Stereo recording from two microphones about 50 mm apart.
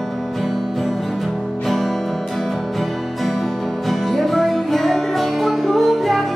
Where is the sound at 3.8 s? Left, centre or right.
Centre.